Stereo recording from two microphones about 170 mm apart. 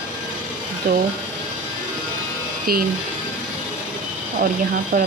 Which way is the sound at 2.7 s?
65° right (ahead or behind).